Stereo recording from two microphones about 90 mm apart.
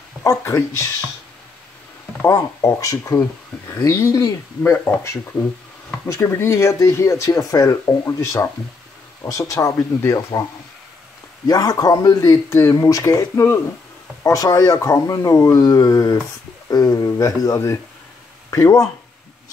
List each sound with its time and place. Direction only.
0.5 s speech: 35° left (ahead or behind)
2.2 s speech: 35° left (ahead or behind)
6.0 s speech: 30° left (ahead or behind)
11.4 s speech: 45° left (ahead or behind)